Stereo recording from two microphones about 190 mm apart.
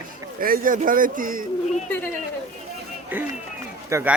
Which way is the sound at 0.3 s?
50° right (ahead or behind).